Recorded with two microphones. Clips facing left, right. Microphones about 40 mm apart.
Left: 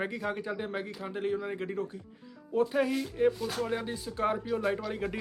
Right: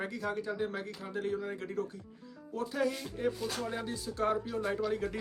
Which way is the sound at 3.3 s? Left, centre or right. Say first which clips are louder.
Left 4 dB; centre.